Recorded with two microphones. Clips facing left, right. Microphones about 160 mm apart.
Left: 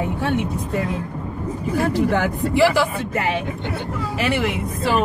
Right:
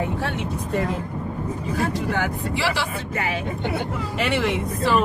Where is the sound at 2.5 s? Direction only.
50° left (ahead or behind).